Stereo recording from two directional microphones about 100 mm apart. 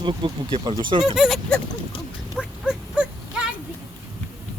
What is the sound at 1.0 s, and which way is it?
Speech, 5° right (ahead or behind).